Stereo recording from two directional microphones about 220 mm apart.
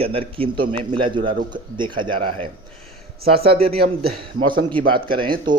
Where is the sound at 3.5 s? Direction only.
25° right (ahead or behind).